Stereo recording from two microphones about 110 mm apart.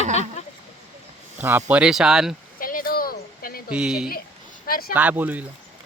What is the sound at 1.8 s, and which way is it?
Speech, 5° right (ahead or behind).